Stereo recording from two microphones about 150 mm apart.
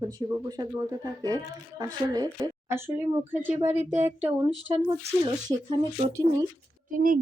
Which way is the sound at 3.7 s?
50° right (ahead or behind).